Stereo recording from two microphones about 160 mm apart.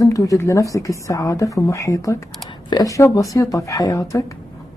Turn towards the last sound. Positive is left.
turn(degrees=20)  # may be behind; listen again after turning